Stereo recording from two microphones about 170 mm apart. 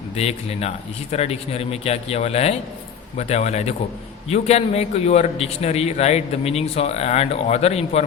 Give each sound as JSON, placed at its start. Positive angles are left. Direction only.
{"t": 0.2, "sound": "a man's voice", "side_deg": 40}